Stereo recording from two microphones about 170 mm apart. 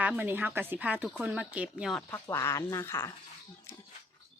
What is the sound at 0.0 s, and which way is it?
A woman's voice, 10° right (ahead or behind).